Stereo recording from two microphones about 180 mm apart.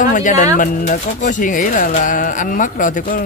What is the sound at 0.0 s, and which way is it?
Speech, 45° left (ahead or behind).